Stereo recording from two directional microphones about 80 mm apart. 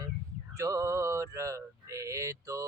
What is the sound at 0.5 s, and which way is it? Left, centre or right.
Male singing, right.